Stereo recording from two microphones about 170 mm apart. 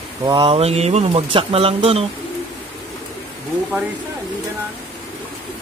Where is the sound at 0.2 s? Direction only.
25° right (ahead or behind).